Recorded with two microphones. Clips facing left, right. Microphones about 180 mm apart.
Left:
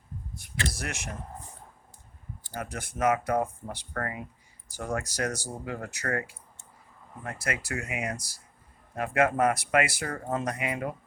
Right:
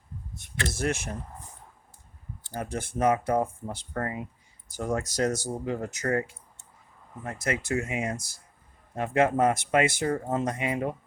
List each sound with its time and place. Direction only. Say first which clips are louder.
0.7 s speech: right 8 dB; 30° right (ahead or behind)
2.6 s speech: right 2 dB; 30° right (ahead or behind)
7.3 s speech: right 4 dB; 20° right (ahead or behind)